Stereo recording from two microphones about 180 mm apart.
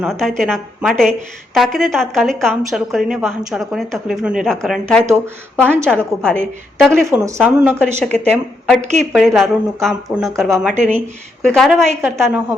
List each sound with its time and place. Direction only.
0.0 s a woman's voice: centre (ahead or behind)
7.0 s a woman's voice: 15° right (ahead or behind)
7.3 s a woman's voice: 5° left (ahead or behind)
12.1 s a woman's voice: 15° right (ahead or behind)